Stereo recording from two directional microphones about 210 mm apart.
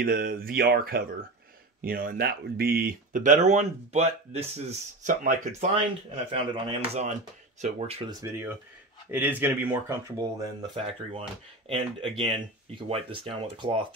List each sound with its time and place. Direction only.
0.0 s speech: 45° right (ahead or behind); by 8.1 s 30° right (ahead or behind)
8.1 s speech: 15° right (ahead or behind)
12.7 s speech: 25° right (ahead or behind)